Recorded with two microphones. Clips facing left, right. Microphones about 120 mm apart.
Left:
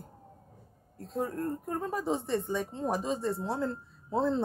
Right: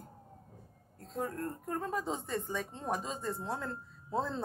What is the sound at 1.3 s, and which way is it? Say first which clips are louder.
Speech: left 4 dB; 25° left (ahead or behind).